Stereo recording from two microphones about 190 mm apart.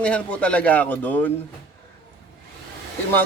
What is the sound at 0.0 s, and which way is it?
Speech, 5° left (ahead or behind).